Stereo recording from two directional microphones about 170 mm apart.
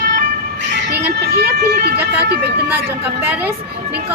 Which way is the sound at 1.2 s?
75° right (ahead or behind).